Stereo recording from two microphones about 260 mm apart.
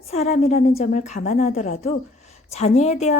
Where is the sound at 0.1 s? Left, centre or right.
Left.